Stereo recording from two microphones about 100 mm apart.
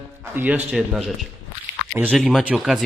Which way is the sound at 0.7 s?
10° right (ahead or behind).